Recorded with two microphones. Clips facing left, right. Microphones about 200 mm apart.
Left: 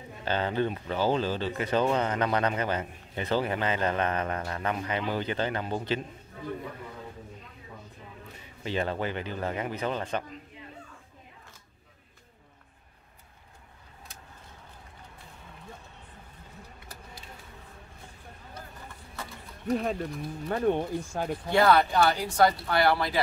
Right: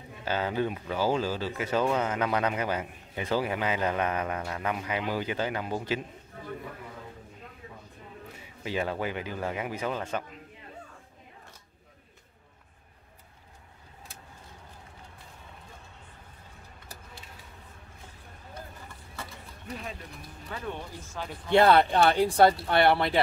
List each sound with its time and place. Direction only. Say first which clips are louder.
0.2 s speech: left 1 dB; 5° right (ahead or behind)
8.6 s speech: left 1 dB; 10° right (ahead or behind)
19.7 s speech: left 12 dB; 45° left (ahead or behind)
21.5 s speech: right 2 dB; 25° right (ahead or behind)